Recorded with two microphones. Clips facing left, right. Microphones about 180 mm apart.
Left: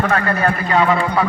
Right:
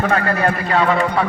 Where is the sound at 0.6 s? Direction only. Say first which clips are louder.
Left 2 dB; centre (ahead or behind).